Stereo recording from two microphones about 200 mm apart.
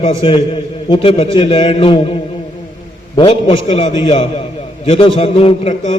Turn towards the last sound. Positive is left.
turn(degrees=30)  # may be behind; listen again after turning